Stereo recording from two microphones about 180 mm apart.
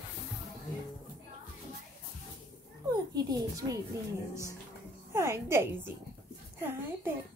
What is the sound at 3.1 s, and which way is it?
Speech, 20° right (ahead or behind).